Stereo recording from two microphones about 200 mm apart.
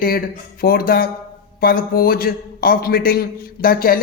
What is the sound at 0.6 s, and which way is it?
A man's voice, 45° left (ahead or behind).